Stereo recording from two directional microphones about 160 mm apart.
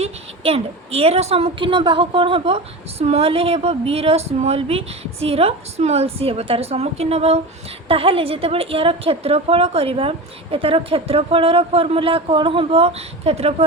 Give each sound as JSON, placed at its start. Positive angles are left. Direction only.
{"t": 0.0, "sound": "a woman's voice", "side_deg": -40}